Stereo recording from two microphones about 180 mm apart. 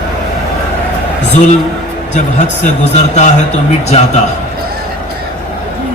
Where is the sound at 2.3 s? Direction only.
40° left (ahead or behind).